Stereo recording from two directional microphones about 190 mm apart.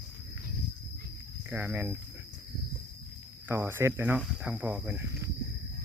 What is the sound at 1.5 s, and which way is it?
Speech, 10° right (ahead or behind).